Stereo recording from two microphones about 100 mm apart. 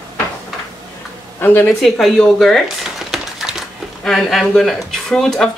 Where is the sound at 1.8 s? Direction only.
Centre (ahead or behind).